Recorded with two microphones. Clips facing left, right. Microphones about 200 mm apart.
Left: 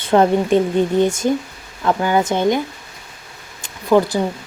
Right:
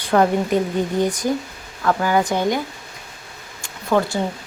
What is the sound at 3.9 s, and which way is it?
Speech, 10° left (ahead or behind).